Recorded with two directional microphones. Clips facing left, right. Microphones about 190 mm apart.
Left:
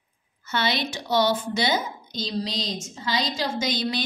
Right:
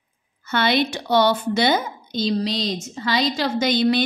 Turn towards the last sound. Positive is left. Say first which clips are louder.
# right 8 dB
turn(degrees=-60)  # may be behind; listen again after turning